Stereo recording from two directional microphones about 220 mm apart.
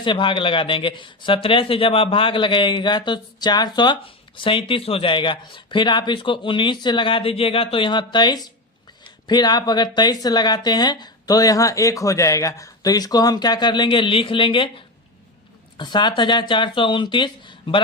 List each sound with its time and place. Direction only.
0.0 s speech: 20° left (ahead or behind)
15.8 s speech: 20° left (ahead or behind)